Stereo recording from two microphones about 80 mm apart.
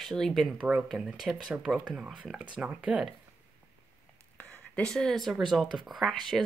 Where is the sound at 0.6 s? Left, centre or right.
Centre.